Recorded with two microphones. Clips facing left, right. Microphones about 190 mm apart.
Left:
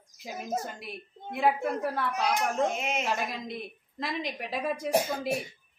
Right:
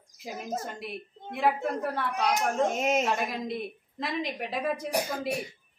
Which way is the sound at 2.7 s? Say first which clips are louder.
Right 5 dB; 40° right (ahead or behind).